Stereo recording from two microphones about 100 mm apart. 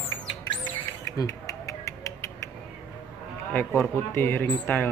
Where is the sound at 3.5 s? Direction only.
20° left (ahead or behind).